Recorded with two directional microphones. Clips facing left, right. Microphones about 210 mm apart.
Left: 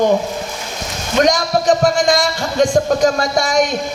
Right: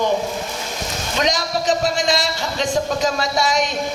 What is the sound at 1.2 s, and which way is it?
A man's voice, 50° left (ahead or behind).